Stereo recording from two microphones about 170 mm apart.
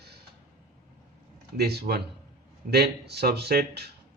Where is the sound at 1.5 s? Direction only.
70° right (ahead or behind).